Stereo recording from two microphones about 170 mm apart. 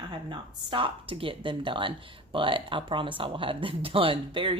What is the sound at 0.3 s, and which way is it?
A woman's voice, 30° right (ahead or behind).